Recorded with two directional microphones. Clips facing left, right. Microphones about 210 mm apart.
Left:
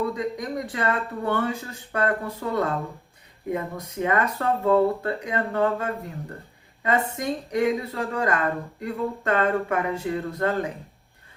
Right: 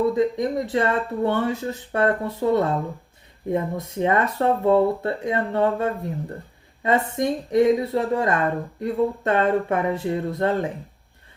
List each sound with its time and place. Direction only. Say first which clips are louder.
0.1 s speech: right 7 dB; 25° right (ahead or behind)